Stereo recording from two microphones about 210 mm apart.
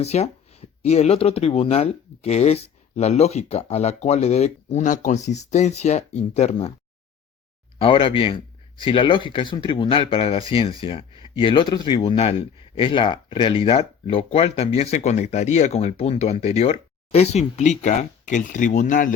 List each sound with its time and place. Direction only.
0.0 s speech: 30° left (ahead or behind)
7.8 s speech: 25° left (ahead or behind)